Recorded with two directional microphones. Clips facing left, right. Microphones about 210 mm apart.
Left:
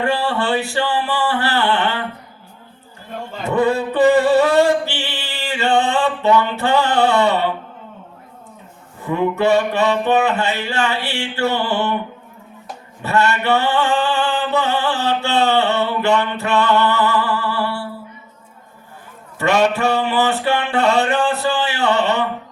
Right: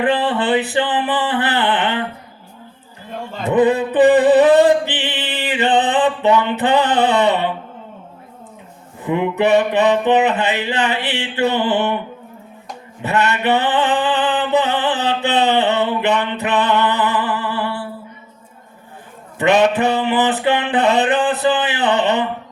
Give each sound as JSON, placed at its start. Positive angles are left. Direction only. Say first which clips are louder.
{"t": 0.0, "sound": "music", "louder": "right 2 dB", "side_deg": -20}
{"t": 3.5, "sound": "music", "louder": "right 3 dB", "side_deg": -20}
{"t": 9.0, "sound": "music", "louder": "right 1 dB", "side_deg": -15}
{"t": 13.0, "sound": "music", "louder": "even", "side_deg": -20}
{"t": 19.4, "sound": "music", "louder": "right 2 dB", "side_deg": -15}